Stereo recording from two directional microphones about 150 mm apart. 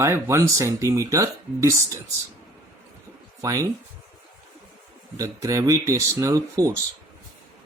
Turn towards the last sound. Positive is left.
turn(degrees=-20)  # may be behind; listen again after turning